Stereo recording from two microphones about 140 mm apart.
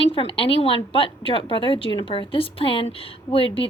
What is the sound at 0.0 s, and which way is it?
A woman's voice, 40° left (ahead or behind).